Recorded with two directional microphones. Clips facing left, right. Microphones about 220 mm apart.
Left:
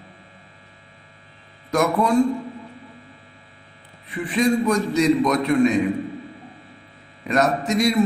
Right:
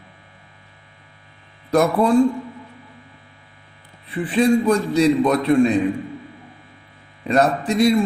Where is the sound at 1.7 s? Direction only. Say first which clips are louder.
Right 3 dB; 30° right (ahead or behind).